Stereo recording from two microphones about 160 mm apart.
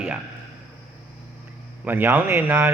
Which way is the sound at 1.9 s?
10° right (ahead or behind).